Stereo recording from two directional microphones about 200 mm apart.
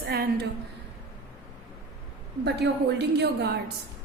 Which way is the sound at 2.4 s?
55° right (ahead or behind).